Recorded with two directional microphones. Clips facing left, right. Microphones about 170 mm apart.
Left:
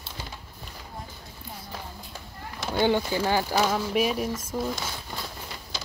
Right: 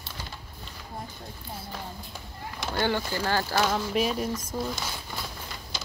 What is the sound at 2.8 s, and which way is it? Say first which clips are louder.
Speech: left 5 dB; 15° left (ahead or behind).